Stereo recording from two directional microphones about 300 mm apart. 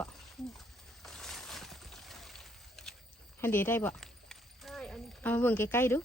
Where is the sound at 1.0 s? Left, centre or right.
Centre.